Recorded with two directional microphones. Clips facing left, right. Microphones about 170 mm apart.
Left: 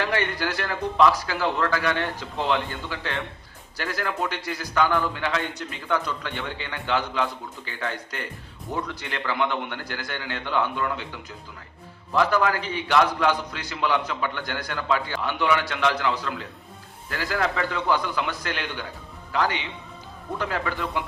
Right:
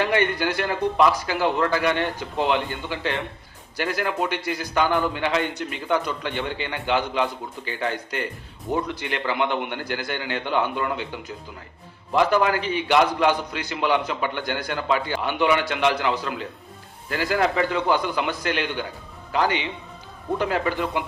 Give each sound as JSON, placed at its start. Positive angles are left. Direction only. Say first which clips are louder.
{"t": 0.0, "sound": "a man's voice", "louder": "right 4 dB", "side_deg": -20}
{"t": 12.1, "sound": "a man's voice", "louder": "right 2 dB", "side_deg": -20}
{"t": 20.4, "sound": "a man's voice", "louder": "right 4 dB", "side_deg": -20}